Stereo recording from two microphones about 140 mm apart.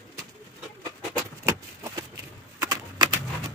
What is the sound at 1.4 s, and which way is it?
Keys jangling, 20° right (ahead or behind).